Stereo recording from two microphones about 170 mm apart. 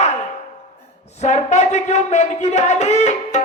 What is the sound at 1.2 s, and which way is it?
Speech, 40° left (ahead or behind).